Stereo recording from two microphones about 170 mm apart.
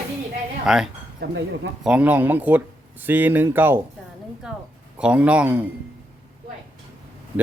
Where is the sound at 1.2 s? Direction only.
90° right.